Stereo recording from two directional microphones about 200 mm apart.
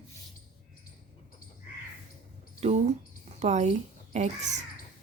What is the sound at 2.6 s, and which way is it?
A woman's voice, 35° right (ahead or behind).